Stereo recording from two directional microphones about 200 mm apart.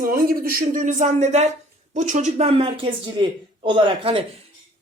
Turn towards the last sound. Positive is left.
turn(degrees=-25)  # may be behind; listen again after turning